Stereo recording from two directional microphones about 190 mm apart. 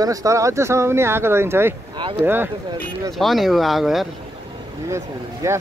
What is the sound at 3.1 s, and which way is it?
Speech, centre (ahead or behind).